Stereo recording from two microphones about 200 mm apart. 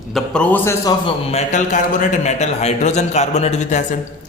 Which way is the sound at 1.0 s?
35° left (ahead or behind).